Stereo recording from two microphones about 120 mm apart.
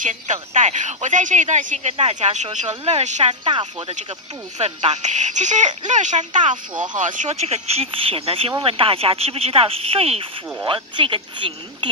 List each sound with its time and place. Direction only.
0.0 s speech: 85° right
2.7 s speech: 60° right (ahead or behind)
3.4 s speech: 45° right (ahead or behind)
4.6 s speech: 70° right (ahead or behind); by 11.9 s 45° right (ahead or behind)